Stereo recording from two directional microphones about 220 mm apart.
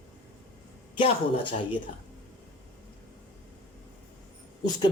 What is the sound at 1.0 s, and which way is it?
Speech, 25° left (ahead or behind).